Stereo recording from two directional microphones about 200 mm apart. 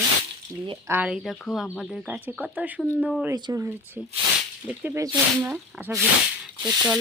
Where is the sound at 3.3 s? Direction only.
15° right (ahead or behind).